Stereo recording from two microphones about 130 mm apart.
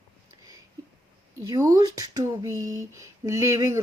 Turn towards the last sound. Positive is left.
turn(degrees=-20)  # may be behind; listen again after turning